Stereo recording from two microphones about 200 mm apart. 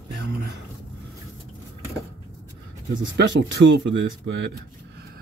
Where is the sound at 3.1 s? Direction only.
60° right (ahead or behind).